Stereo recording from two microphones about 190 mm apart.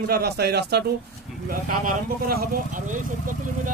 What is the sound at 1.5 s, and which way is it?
Speech, 50° right (ahead or behind).